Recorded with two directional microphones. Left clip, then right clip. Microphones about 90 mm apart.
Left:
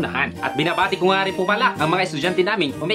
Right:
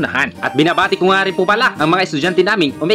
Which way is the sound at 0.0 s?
45° right (ahead or behind).